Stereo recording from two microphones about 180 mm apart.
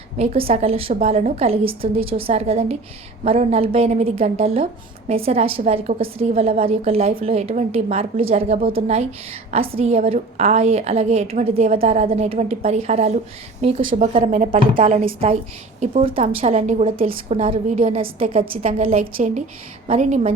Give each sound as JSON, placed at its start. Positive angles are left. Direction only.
{"t": 0.2, "sound": "a woman's voice", "side_deg": -30}
{"t": 18.9, "sound": "a woman's voice", "side_deg": -45}